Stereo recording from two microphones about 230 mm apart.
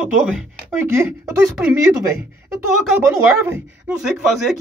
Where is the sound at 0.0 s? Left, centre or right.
Centre.